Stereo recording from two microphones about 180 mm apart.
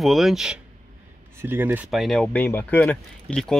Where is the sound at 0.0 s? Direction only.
Centre (ahead or behind).